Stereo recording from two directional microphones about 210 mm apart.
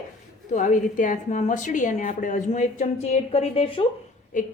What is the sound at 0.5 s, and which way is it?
Speech, 35° left (ahead or behind).